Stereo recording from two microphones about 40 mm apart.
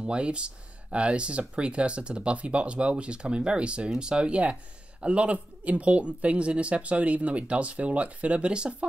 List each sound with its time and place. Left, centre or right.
0.0 s speech: right